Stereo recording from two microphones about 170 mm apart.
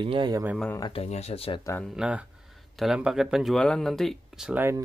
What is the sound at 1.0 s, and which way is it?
Speech, 40° left (ahead or behind).